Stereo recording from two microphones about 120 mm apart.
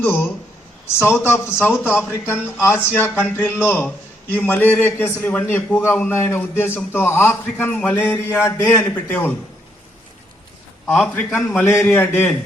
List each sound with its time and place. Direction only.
0.0 s a man's voice: 20° left (ahead or behind)
10.9 s a man's voice: 15° left (ahead or behind)